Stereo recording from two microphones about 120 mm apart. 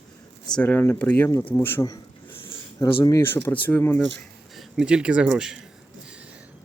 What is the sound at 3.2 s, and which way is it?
Speech, 20° left (ahead or behind).